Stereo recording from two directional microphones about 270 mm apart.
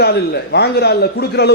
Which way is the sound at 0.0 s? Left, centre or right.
Left.